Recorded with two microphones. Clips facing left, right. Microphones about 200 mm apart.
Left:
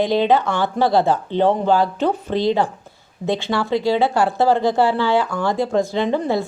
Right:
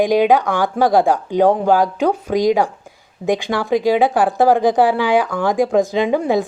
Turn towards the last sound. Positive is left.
turn(degrees=-15)  # may be behind; listen again after turning